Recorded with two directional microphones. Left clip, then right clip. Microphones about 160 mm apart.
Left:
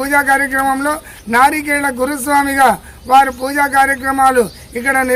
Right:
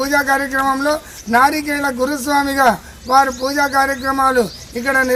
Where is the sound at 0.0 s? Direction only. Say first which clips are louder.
Left 3 dB; 35° left (ahead or behind).